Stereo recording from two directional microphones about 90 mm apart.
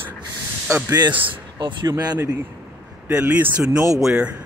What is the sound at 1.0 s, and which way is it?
Speech, 60° right (ahead or behind).